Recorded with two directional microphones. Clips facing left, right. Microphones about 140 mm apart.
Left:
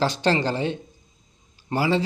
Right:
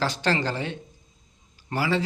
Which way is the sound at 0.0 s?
25° left (ahead or behind).